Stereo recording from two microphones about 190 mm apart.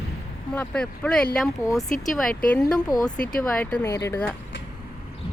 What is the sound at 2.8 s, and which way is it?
Speech, 20° left (ahead or behind).